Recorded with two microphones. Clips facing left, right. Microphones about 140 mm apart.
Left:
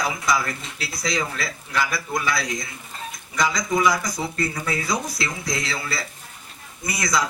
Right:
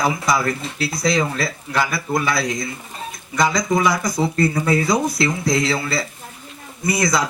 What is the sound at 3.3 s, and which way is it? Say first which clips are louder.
Speech: right 4 dB; 55° right (ahead or behind).